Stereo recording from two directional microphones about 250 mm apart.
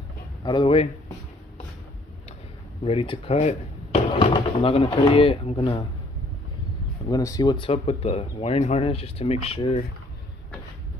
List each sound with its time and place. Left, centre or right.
0.4 s speech: centre
2.8 s speech: left
7.1 s speech: centre